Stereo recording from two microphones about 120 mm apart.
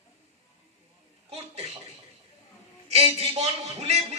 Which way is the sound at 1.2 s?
55° right (ahead or behind).